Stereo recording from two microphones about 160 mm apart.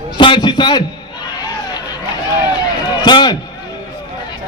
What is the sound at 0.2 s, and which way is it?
Speech, 30° left (ahead or behind).